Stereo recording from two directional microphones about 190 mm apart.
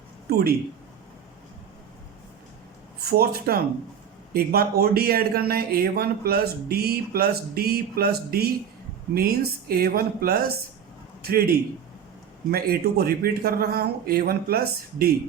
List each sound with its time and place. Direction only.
0.3 s speech: 55° right (ahead or behind)
3.0 s a man's voice: 55° right (ahead or behind)